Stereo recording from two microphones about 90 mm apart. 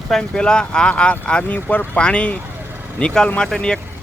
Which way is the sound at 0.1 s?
10° left (ahead or behind).